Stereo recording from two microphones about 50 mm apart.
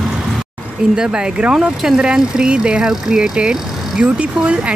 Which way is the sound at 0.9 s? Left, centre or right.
Centre.